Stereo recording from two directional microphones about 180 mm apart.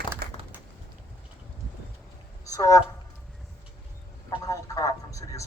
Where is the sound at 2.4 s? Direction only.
20° left (ahead or behind).